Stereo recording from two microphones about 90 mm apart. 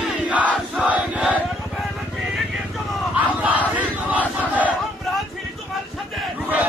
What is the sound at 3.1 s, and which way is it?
Battle cry, 15° right (ahead or behind).